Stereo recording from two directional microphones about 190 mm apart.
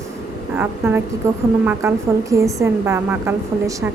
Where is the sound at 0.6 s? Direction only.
10° right (ahead or behind).